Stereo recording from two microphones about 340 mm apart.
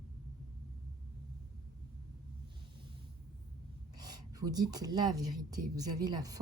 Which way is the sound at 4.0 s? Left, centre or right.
Centre.